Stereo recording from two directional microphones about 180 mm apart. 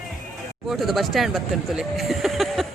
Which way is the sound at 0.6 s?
Centre (ahead or behind).